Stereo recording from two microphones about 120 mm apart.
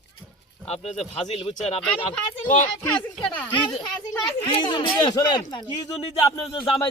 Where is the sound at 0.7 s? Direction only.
60° left (ahead or behind).